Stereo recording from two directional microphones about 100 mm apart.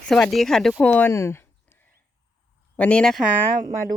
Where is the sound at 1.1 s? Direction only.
25° left (ahead or behind).